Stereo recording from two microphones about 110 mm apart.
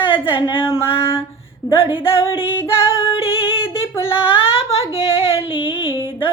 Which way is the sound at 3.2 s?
55° left (ahead or behind).